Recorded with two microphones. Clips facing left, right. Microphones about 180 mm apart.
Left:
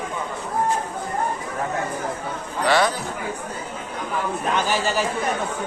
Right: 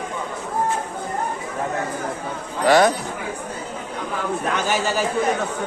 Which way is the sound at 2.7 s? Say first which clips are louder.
Right 5 dB; 45° right (ahead or behind).